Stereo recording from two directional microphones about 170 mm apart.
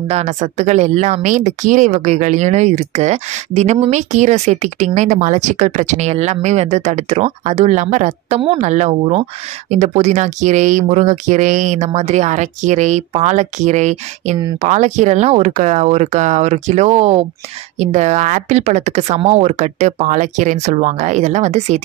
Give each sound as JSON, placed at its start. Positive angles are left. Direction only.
{"t": 0.1, "sound": "speech", "side_deg": -40}